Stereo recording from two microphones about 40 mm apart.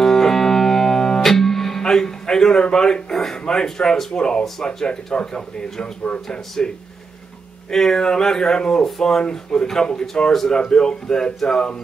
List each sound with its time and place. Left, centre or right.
0.0 s music: centre
2.6 s speech: centre